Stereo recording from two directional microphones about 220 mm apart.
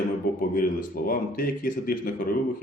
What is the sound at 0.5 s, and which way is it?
A man's voice, 40° left (ahead or behind).